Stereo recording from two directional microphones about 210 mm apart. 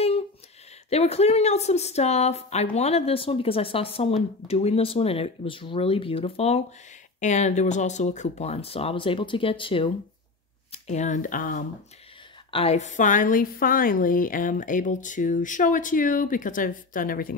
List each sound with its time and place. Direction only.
0.8 s a woman's voice: 30° left (ahead or behind)
12.4 s a woman's voice: 30° left (ahead or behind)